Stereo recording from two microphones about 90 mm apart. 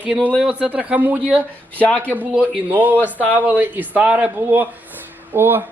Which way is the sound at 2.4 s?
20° right (ahead or behind).